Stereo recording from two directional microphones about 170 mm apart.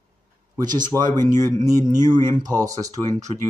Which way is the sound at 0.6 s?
25° right (ahead or behind).